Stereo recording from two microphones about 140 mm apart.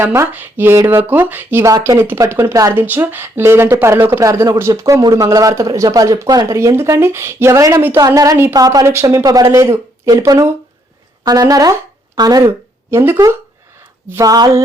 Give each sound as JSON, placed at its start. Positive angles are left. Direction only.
{"t": 0.0, "sound": "speech", "side_deg": -15}